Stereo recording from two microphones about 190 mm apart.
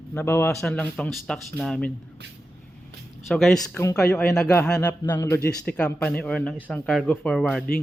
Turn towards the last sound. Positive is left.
turn(degrees=5)  # may be behind; listen again after turning